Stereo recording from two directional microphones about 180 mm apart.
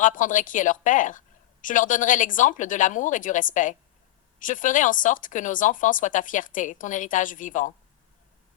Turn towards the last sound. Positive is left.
turn(degrees=45)  # may be behind; listen again after turning